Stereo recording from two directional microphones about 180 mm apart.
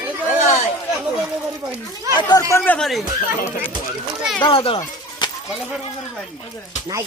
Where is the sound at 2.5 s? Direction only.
10° left (ahead or behind).